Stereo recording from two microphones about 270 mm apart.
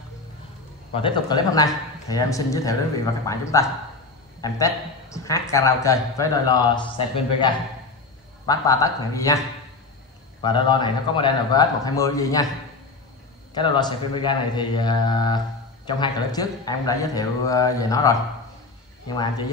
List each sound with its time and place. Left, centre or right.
0.9 s a man's voice: centre
8.5 s a man's voice: centre
10.4 s a man's voice: centre
13.6 s a man's voice: centre